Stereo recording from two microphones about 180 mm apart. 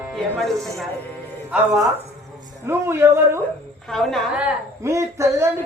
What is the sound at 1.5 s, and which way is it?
Speech, centre (ahead or behind).